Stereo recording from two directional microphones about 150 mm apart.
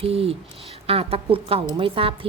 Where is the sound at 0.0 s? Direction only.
40° right (ahead or behind).